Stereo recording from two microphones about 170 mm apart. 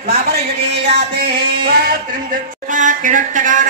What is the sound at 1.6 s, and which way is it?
Speech, 65° right (ahead or behind).